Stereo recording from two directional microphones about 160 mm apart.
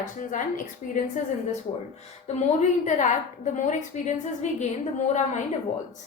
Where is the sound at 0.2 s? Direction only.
55° left (ahead or behind).